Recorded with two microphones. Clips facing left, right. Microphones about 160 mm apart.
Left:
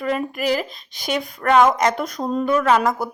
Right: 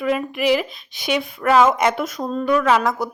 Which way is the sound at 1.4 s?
5° right (ahead or behind).